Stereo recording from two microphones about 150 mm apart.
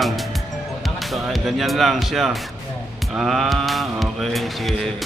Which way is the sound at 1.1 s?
Centre (ahead or behind).